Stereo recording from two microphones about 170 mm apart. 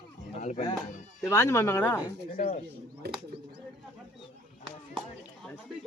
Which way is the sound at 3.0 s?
70° right (ahead or behind).